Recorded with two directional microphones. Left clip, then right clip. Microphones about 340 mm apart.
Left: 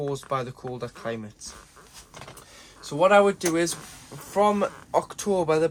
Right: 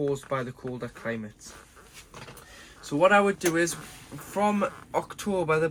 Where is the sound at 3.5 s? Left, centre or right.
Centre.